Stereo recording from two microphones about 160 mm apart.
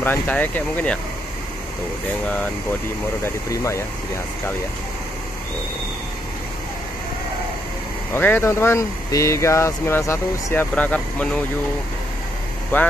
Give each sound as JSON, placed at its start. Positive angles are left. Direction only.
{"t": 0.0, "sound": "speech", "side_deg": 10}
{"t": 3.3, "sound": "speech", "side_deg": 20}
{"t": 8.1, "sound": "speech", "side_deg": 15}
{"t": 12.7, "sound": "speech", "side_deg": 10}